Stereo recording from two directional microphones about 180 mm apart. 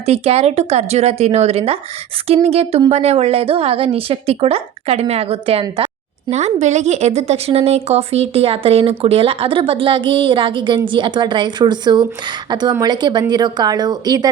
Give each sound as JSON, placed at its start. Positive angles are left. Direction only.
{"t": 0.0, "sound": "a woman's voice", "side_deg": -35}
{"t": 6.3, "sound": "speech", "side_deg": -40}